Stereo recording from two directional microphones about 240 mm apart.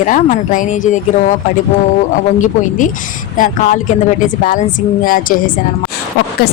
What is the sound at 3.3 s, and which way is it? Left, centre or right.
A woman's voice, left.